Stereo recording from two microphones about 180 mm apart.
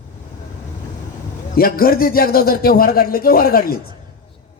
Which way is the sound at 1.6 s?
55° left (ahead or behind).